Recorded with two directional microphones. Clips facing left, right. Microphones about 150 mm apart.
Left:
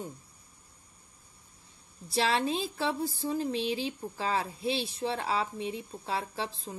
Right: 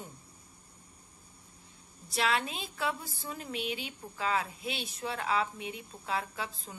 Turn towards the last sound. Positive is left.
turn(degrees=30)  # may be behind; listen again after turning